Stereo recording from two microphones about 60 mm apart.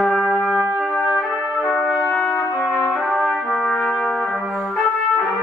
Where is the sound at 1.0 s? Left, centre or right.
Centre.